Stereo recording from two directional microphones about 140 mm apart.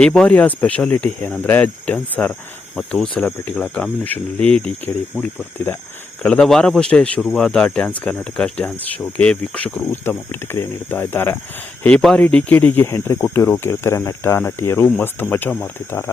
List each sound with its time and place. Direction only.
0.0 s speech: 5° left (ahead or behind)
6.2 s speech: 5° left (ahead or behind)